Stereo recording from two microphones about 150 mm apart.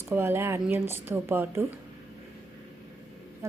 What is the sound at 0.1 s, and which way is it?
A woman's voice, 15° right (ahead or behind).